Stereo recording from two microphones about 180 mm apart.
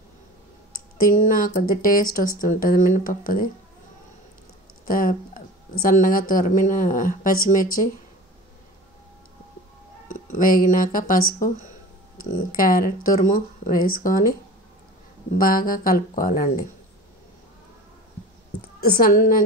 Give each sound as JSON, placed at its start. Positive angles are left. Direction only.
{"t": 0.9, "sound": "speech", "side_deg": 50}
{"t": 4.8, "sound": "speech", "side_deg": 50}
{"t": 10.0, "sound": "speech", "side_deg": 50}
{"t": 15.3, "sound": "speech", "side_deg": 50}
{"t": 18.8, "sound": "speech", "side_deg": 55}